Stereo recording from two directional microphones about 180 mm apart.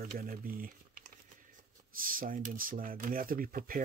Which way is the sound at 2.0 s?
50° right (ahead or behind).